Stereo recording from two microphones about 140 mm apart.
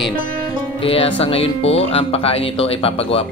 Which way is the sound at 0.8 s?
45° left (ahead or behind).